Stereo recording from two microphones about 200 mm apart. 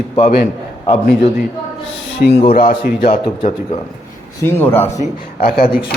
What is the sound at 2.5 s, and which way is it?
Speech, 45° left (ahead or behind).